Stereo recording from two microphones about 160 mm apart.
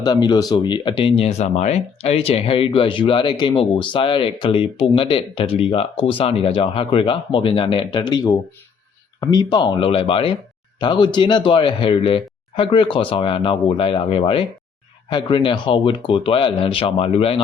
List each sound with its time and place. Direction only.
0.0 s speech: 25° left (ahead or behind)